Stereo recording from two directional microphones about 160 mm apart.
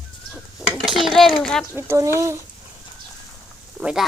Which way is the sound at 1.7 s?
15° right (ahead or behind).